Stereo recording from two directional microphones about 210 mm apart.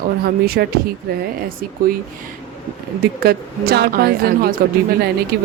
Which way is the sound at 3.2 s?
50° right (ahead or behind).